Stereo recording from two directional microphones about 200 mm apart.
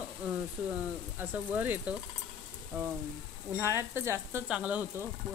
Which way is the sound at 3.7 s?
10° right (ahead or behind).